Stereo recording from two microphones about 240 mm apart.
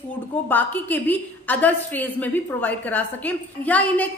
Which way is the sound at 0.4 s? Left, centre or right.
Centre.